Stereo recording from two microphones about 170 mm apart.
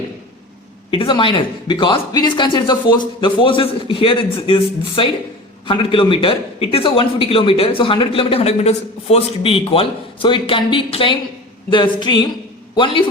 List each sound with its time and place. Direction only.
0.9 s a man's voice: 30° left (ahead or behind)